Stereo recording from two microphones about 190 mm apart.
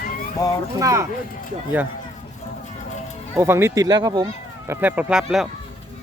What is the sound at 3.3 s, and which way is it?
Speech, 15° right (ahead or behind).